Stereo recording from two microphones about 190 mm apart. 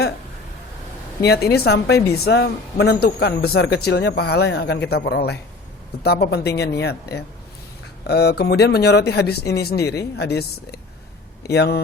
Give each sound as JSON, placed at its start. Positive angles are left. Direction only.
{"t": 1.2, "sound": "speech", "side_deg": 55}